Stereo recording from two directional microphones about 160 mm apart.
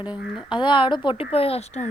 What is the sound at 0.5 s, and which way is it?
Speech, 30° left (ahead or behind).